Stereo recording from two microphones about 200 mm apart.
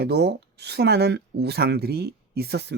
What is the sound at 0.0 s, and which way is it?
Speech, 55° right (ahead or behind).